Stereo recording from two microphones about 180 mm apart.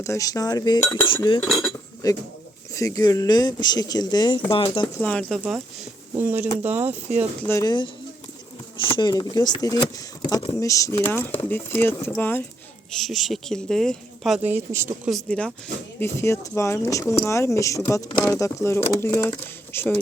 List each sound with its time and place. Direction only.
0.0 s speech: 20° left (ahead or behind)
1.0 s speech: 30° left (ahead or behind)
1.4 s speech: centre (ahead or behind)
2.0 s speech: 20° left (ahead or behind)
4.9 s speech: 5° left (ahead or behind)
5.4 s speech: 10° right (ahead or behind)
7.4 s speech: 20° left (ahead or behind)
12.9 s speech: centre (ahead or behind)
15.1 s speech: 5° left (ahead or behind)